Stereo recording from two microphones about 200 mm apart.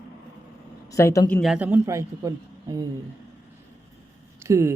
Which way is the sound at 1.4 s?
5° right (ahead or behind).